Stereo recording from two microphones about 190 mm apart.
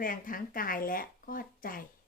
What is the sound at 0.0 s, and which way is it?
A woman's voice, 45° left (ahead or behind).